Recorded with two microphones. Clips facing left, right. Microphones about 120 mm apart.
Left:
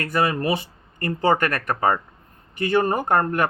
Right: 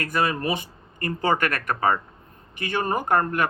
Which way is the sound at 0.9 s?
35° left (ahead or behind).